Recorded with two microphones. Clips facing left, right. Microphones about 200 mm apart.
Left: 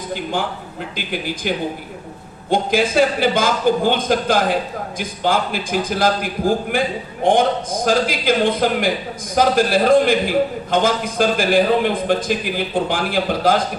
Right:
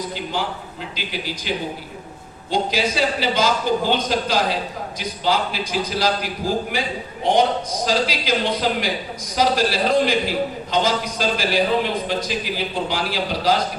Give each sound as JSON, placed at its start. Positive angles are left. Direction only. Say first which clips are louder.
{"t": 0.1, "sound": "a man's voice", "louder": "left 3 dB", "side_deg": 50}